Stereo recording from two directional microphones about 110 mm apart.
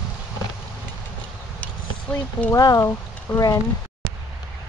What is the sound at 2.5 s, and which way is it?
Speech, 30° left (ahead or behind).